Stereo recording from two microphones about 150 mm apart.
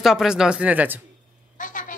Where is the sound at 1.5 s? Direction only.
60° left (ahead or behind).